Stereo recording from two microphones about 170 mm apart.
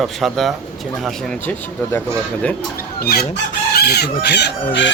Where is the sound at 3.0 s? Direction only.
65° left (ahead or behind); by 4.8 s 90° left.